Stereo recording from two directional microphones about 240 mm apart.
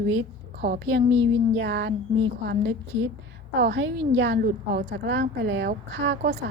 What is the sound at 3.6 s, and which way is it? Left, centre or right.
A woman's voice, right.